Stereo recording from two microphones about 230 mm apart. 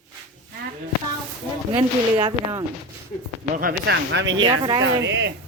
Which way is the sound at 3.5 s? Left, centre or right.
Right.